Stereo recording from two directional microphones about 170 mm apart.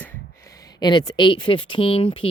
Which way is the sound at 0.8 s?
25° left (ahead or behind).